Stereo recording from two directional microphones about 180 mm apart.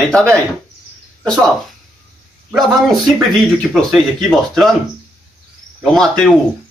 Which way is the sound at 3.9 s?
Centre (ahead or behind).